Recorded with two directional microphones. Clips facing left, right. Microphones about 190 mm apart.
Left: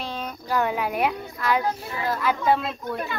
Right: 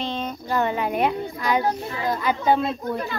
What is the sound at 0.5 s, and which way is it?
A child's voice, 5° left (ahead or behind).